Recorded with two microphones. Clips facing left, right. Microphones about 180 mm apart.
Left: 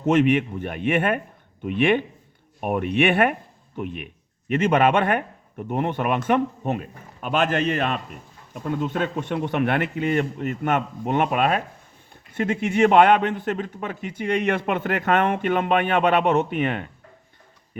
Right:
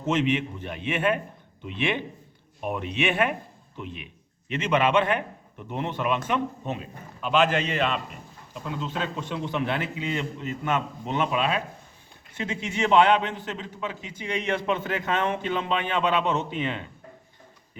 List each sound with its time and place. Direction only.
0.0 s a man's voice: 55° left (ahead or behind)